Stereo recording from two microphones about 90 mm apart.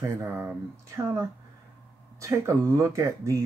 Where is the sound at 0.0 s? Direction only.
35° right (ahead or behind).